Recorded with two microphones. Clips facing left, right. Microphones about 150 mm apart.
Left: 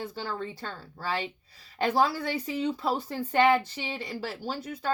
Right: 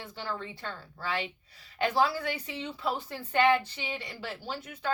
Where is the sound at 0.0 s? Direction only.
35° left (ahead or behind).